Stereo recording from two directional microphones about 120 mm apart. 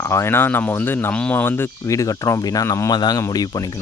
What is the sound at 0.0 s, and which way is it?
Speech, 20° left (ahead or behind).